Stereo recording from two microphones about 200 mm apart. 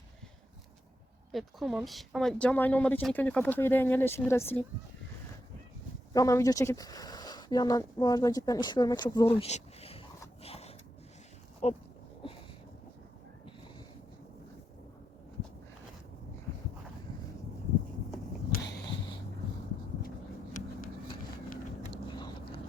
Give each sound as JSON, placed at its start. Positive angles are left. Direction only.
{"t": 1.3, "sound": "speech", "side_deg": 0}
{"t": 6.1, "sound": "speech", "side_deg": 15}
{"t": 10.4, "sound": "a sound", "side_deg": 30}
{"t": 11.6, "sound": "pig", "side_deg": 30}